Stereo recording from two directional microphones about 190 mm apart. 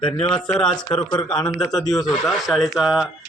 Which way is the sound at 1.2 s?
5° left (ahead or behind).